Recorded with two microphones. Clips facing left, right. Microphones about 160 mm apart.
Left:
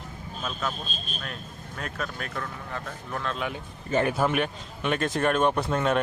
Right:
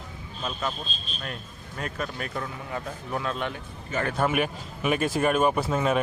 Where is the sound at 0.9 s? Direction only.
50° left (ahead or behind).